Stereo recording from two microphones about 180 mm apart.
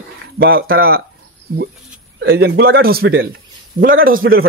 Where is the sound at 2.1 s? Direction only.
70° right (ahead or behind).